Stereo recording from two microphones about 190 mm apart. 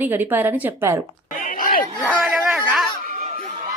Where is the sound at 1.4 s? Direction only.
50° left (ahead or behind).